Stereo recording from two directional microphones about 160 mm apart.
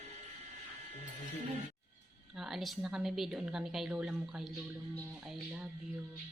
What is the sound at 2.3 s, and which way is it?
A woman's voice, centre (ahead or behind).